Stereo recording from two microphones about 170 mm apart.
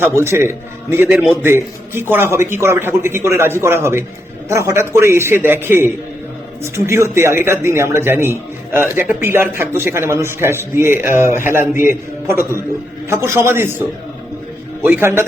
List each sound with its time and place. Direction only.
0.0 s a man's voice: 15° right (ahead or behind)
14.8 s a man's voice: 15° right (ahead or behind)